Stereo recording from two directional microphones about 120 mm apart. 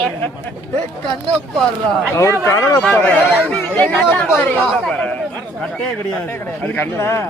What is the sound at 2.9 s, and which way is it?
Speech, 15° left (ahead or behind).